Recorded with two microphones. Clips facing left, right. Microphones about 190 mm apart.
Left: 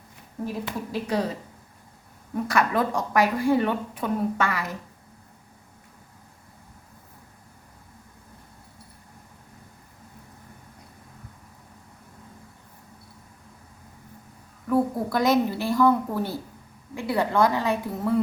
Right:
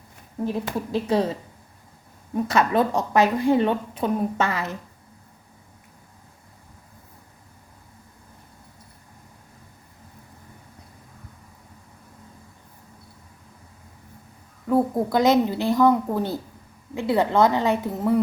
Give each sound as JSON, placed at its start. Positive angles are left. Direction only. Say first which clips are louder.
{"t": 1.0, "sound": "a woman's voice", "louder": "right 4 dB", "side_deg": -25}
{"t": 2.3, "sound": "a woman's voice", "louder": "right 3 dB", "side_deg": -25}
{"t": 14.7, "sound": "a woman's voice", "louder": "right 3 dB", "side_deg": -20}